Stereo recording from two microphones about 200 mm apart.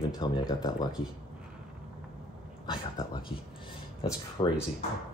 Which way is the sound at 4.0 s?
20° left (ahead or behind).